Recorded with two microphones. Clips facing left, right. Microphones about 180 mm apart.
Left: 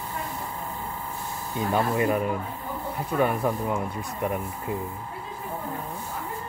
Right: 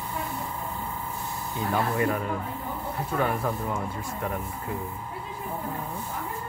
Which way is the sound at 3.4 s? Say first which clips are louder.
Left 3 dB; 20° left (ahead or behind).